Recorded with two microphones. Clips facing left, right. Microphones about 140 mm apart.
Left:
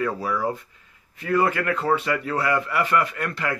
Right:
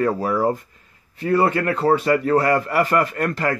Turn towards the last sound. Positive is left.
turn(degrees=-45)  # may be behind; listen again after turning